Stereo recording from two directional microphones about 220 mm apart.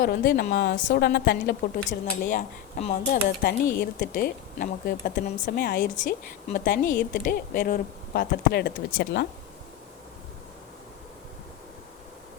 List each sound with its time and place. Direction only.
0.0 s a woman's voice: 45° left (ahead or behind)